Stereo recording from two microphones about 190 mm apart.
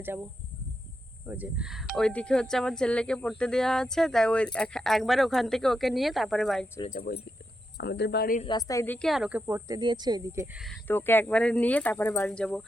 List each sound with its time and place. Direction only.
0.0 s speech: 10° right (ahead or behind)
1.3 s speech: 5° right (ahead or behind)
7.1 s speech: 50° left (ahead or behind)
7.8 s speech: 60° left (ahead or behind)
8.4 s speech: 25° left (ahead or behind); by 9.4 s centre (ahead or behind)
9.5 s speech: 15° right (ahead or behind)
10.8 s speech: 10° left (ahead or behind)